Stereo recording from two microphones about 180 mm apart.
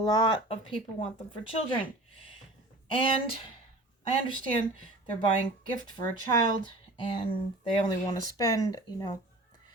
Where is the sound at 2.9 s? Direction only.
30° left (ahead or behind).